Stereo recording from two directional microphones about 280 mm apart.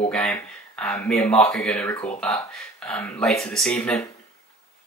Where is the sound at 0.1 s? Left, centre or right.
Centre.